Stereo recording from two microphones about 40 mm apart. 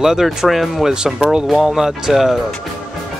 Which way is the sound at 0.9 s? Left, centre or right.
Centre.